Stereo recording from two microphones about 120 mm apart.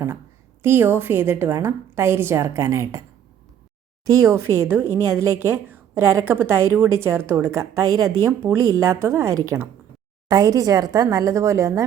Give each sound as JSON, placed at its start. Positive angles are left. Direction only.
{"t": 0.6, "sound": "a woman's voice", "side_deg": -20}
{"t": 4.0, "sound": "a woman's voice", "side_deg": -25}